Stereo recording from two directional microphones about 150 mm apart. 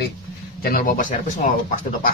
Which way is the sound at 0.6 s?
70° left (ahead or behind).